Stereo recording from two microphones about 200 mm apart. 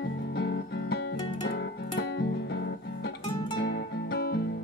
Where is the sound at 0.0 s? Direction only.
60° left (ahead or behind).